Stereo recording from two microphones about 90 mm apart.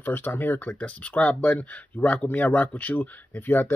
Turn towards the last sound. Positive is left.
turn(degrees=25)  # may be behind; listen again after turning